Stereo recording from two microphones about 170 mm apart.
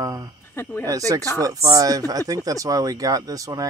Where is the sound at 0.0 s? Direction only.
20° right (ahead or behind).